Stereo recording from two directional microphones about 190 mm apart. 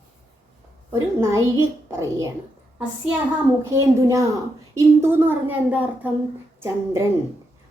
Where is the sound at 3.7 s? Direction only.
15° right (ahead or behind).